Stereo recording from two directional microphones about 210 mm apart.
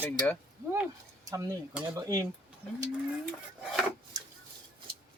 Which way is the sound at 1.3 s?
15° right (ahead or behind).